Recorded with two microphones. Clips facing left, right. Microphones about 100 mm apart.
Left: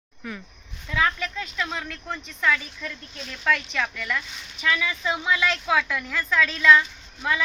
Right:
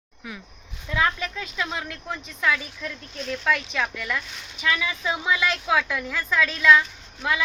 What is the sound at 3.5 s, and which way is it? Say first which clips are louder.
A woman's voice: left 3 dB; 10° right (ahead or behind).